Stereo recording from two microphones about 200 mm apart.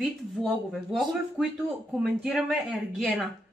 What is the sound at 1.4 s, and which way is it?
Speech, 5° right (ahead or behind).